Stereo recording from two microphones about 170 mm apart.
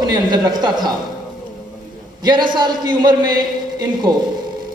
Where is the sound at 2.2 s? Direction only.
25° right (ahead or behind).